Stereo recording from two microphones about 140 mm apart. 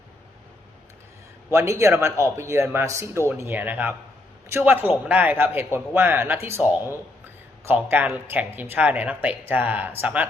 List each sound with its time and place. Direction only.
1.5 s a man's voice: 20° right (ahead or behind)